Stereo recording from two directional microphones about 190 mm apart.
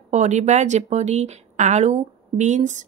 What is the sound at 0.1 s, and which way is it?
A woman's voice, 40° right (ahead or behind).